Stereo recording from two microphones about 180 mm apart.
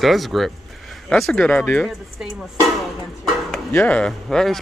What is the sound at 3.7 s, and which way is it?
Speech, 10° left (ahead or behind).